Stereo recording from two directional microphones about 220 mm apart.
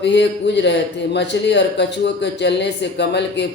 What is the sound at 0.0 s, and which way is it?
Speech, 50° left (ahead or behind).